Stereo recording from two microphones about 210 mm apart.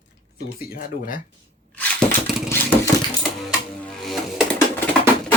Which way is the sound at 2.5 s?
10° left (ahead or behind).